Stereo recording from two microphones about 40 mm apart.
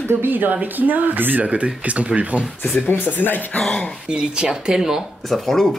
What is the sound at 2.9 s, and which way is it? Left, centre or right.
Speech, left.